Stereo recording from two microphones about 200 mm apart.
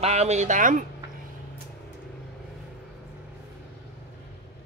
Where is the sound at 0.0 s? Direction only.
35° right (ahead or behind).